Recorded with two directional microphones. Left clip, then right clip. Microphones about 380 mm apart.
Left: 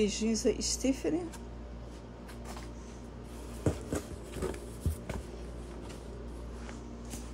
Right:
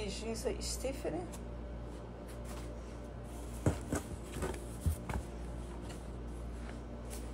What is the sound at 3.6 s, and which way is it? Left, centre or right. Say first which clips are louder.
Music: left 3 dB; centre.